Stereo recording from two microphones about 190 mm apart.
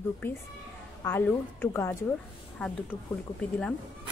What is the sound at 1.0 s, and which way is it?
A woman's voice, 10° left (ahead or behind).